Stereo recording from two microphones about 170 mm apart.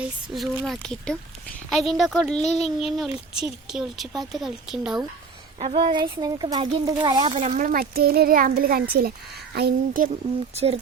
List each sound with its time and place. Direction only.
0.3 s a child's voice: centre (ahead or behind)
5.5 s a woman's voice: 35° right (ahead or behind)
7.5 s a child's voice: 55° right (ahead or behind)
10.5 s speech: 35° right (ahead or behind)